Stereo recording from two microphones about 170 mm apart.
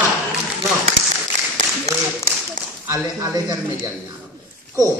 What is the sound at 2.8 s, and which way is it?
Speech, 20° right (ahead or behind).